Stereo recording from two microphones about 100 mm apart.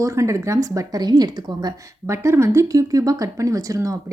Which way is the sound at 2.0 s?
30° right (ahead or behind).